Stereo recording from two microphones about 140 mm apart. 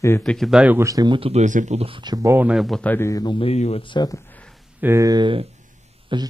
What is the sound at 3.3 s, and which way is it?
Speech, 45° left (ahead or behind).